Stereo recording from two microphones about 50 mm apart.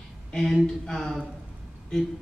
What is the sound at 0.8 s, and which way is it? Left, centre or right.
Speech, centre.